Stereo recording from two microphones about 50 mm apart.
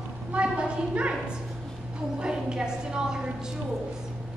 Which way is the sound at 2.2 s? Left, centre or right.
Centre.